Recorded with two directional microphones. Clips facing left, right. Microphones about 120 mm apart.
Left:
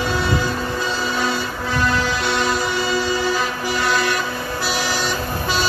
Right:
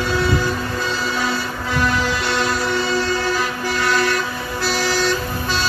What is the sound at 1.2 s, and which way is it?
Music, 5° right (ahead or behind).